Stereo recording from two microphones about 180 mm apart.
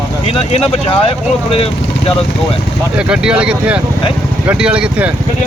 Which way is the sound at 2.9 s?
5° right (ahead or behind).